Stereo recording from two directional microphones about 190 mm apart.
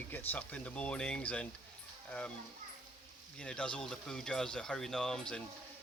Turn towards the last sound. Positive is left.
turn(degrees=5)  # may be behind; listen again after turning